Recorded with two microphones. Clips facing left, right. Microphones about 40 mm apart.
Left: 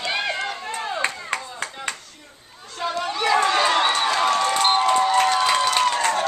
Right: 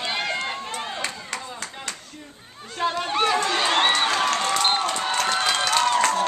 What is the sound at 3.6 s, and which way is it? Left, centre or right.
Crowd, right.